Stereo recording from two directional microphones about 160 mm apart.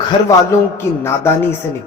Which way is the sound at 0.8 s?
15° left (ahead or behind).